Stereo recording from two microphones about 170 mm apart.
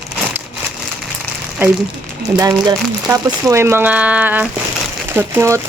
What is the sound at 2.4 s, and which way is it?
Speech, 20° right (ahead or behind).